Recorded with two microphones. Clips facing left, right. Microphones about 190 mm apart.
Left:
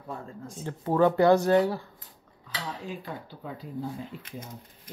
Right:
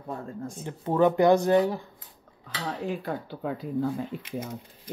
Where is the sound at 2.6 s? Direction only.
60° right (ahead or behind).